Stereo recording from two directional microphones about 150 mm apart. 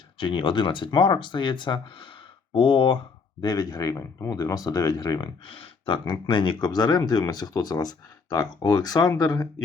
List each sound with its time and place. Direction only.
0.2 s speech: 35° left (ahead or behind)